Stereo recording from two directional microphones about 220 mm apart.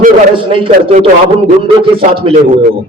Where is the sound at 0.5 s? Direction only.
25° right (ahead or behind).